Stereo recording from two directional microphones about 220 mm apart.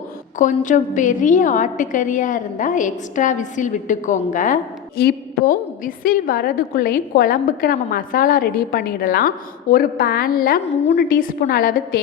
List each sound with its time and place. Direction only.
0.3 s a woman's voice: 35° left (ahead or behind)